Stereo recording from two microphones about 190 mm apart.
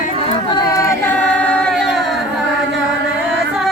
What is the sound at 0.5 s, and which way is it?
Choir, 15° left (ahead or behind).